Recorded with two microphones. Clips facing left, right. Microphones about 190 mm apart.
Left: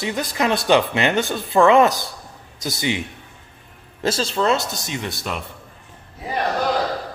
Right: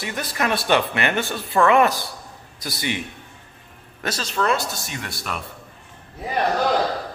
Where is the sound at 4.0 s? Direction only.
30° left (ahead or behind).